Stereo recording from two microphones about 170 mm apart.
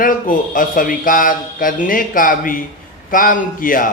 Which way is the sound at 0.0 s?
50° left (ahead or behind).